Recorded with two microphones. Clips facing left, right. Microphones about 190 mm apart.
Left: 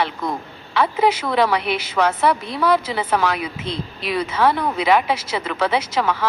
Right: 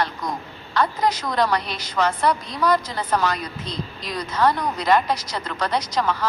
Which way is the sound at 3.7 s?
65° left (ahead or behind).